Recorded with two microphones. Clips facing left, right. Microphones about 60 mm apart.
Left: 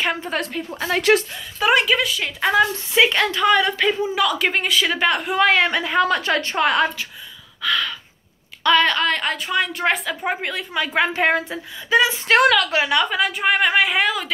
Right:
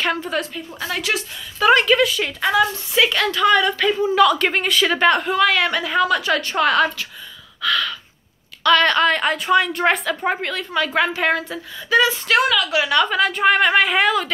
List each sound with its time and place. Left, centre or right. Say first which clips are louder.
0.0 s a woman's voice: right 1 dB; centre
0.7 s a woman's voice: left 3 dB; left
1.6 s a woman's voice: right 3 dB; centre
2.4 s a woman's voice: left 1 dB; left
4.0 s a woman's voice: right 5 dB; centre
5.3 s a woman's voice: even; left
8.8 s a woman's voice: right 3 dB; centre
10.4 s a woman's voice: right 2 dB; centre
11.0 s a woman's voice: left 2 dB; left
12.4 s a woman's voice: left 3 dB; left
12.9 s a woman's voice: right 2 dB; centre